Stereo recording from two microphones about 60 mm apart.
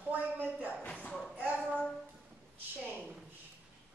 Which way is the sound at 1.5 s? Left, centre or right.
Centre.